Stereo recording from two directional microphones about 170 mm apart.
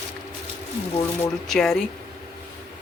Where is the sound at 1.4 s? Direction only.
Centre (ahead or behind).